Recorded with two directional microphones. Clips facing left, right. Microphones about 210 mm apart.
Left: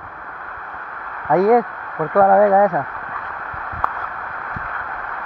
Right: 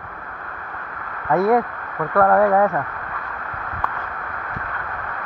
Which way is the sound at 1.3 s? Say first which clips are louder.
Left 3 dB; 15° left (ahead or behind).